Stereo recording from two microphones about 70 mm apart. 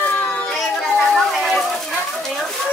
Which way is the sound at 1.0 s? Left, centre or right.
Centre.